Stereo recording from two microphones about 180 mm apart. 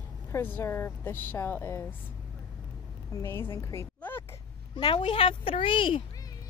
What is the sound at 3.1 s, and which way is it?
A woman's voice, 15° left (ahead or behind).